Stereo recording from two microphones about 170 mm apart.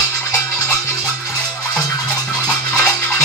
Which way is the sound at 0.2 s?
15° left (ahead or behind).